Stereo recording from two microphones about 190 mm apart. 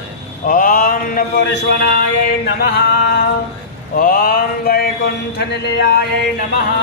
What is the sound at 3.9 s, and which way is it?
Speech, 50° left (ahead or behind).